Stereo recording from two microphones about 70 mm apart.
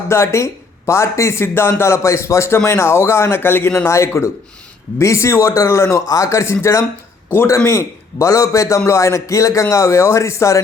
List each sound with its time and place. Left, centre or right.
0.1 s speech: left